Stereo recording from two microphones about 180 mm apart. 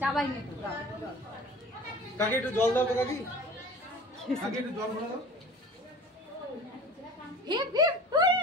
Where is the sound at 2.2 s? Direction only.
10° left (ahead or behind).